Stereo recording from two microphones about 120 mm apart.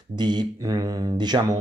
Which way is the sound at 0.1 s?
40° right (ahead or behind).